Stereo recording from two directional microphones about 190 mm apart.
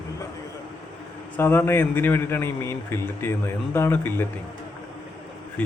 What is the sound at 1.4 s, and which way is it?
A man's voice, 10° left (ahead or behind).